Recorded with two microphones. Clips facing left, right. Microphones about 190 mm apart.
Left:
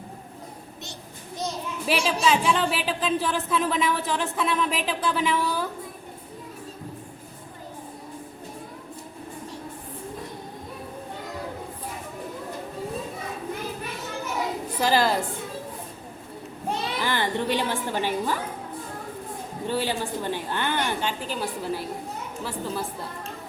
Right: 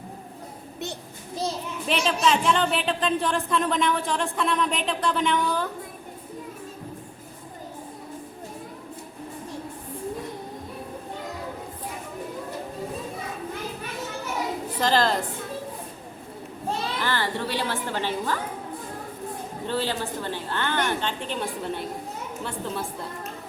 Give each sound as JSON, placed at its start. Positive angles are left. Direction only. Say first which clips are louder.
{"t": 1.9, "sound": "speech", "louder": "even", "side_deg": 5}
{"t": 14.8, "sound": "a woman's voice", "louder": "left 1 dB", "side_deg": 10}
{"t": 16.6, "sound": "a sound", "louder": "even", "side_deg": 20}
{"t": 19.6, "sound": "a woman's voice", "louder": "left 1 dB", "side_deg": 15}